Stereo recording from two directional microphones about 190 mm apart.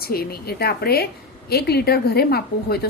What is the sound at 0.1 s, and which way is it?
Speech, 55° left (ahead or behind).